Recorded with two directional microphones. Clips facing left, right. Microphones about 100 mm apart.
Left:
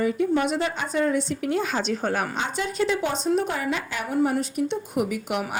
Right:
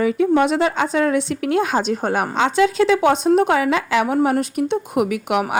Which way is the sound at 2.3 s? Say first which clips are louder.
Right 11 dB; 90° right.